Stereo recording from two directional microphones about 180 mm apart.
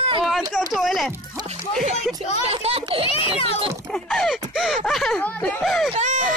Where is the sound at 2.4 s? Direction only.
35° right (ahead or behind).